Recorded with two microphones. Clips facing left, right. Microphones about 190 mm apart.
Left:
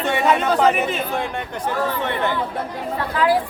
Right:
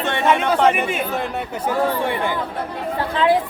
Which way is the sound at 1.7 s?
10° right (ahead or behind).